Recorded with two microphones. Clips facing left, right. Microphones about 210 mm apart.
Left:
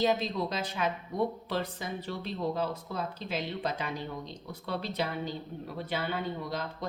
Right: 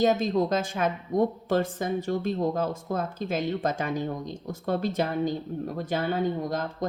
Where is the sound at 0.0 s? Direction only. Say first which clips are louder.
Right 6 dB; 45° right (ahead or behind).